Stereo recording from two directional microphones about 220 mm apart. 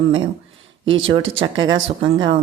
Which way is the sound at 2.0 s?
20° right (ahead or behind).